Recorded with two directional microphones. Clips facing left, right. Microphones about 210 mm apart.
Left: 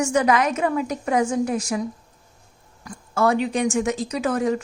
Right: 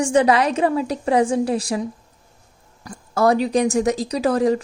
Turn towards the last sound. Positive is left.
turn(degrees=-35)  # may be behind; listen again after turning